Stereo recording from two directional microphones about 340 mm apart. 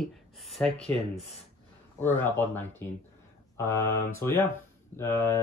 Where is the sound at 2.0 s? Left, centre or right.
Centre.